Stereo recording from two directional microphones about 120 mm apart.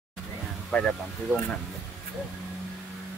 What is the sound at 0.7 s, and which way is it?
Speech, centre (ahead or behind).